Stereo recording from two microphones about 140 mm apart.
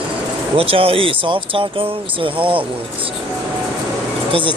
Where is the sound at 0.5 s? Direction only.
40° right (ahead or behind).